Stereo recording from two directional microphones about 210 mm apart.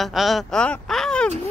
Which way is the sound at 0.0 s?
Centre (ahead or behind).